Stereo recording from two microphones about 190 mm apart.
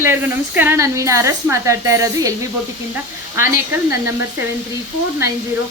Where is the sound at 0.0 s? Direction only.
10° right (ahead or behind).